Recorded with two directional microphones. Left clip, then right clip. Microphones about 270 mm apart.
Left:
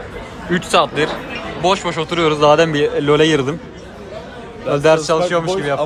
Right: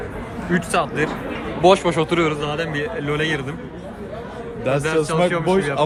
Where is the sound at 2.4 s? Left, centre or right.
Centre.